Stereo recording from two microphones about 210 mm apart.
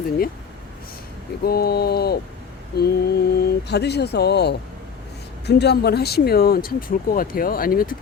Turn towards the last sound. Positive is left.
turn(degrees=45)  # may be behind; listen again after turning